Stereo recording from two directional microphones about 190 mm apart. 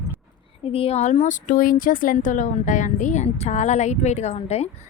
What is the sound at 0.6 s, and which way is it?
Speech, 30° left (ahead or behind).